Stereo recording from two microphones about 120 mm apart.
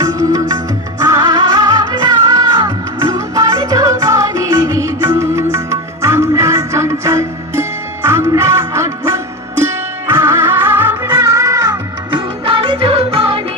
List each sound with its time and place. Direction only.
0.0 s music: 30° right (ahead or behind)
11.0 s music: 30° right (ahead or behind)
12.5 s music: 50° right (ahead or behind)